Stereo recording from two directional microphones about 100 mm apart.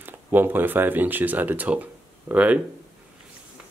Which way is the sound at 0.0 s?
20° right (ahead or behind).